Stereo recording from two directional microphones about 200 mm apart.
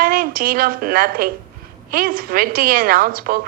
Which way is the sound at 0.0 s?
45° right (ahead or behind).